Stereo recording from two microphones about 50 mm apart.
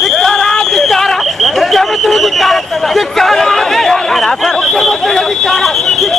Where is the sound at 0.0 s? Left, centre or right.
Centre.